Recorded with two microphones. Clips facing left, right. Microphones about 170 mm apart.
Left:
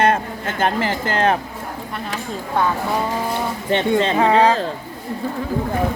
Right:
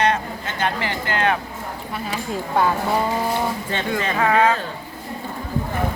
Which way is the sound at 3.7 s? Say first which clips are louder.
Left 6 dB; 20° left (ahead or behind).